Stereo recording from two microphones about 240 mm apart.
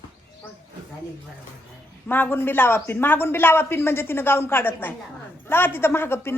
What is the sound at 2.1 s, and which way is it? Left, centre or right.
Speech, centre.